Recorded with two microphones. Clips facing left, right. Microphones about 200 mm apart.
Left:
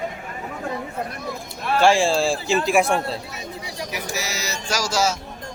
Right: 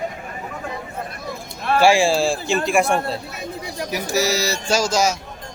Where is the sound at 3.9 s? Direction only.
35° right (ahead or behind); by 5.2 s 15° right (ahead or behind).